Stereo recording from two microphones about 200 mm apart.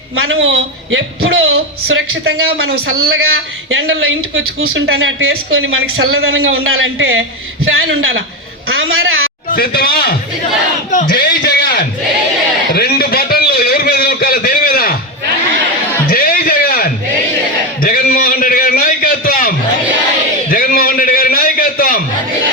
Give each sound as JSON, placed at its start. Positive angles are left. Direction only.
{"t": 0.3, "sound": "a man's voice", "side_deg": -80}
{"t": 1.5, "sound": "a woman's voice", "side_deg": -90}
{"t": 2.2, "sound": "speech", "side_deg": -50}
{"t": 3.7, "sound": "a woman's voice", "side_deg": -75}
{"t": 9.5, "sound": "speech", "side_deg": 50}
{"t": 11.1, "sound": "a sound", "side_deg": 55}
{"t": 16.0, "sound": "a sound", "side_deg": 45}